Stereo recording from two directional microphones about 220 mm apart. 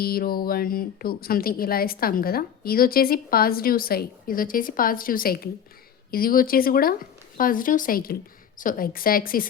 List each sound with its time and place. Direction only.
0.0 s speech: 45° left (ahead or behind)